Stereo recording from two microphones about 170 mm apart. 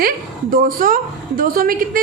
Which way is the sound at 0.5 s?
55° right (ahead or behind).